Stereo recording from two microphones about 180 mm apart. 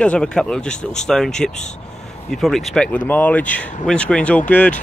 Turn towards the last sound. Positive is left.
turn(degrees=10)  # may be behind; listen again after turning